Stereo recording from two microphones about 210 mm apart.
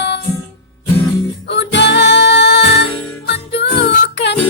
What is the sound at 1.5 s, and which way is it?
Music, 55° left (ahead or behind).